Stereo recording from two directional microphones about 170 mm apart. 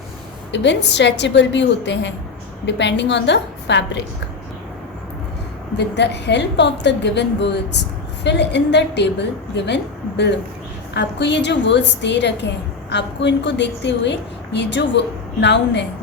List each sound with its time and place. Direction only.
0.5 s a woman's voice: 90° left
5.7 s a woman's voice: 90° left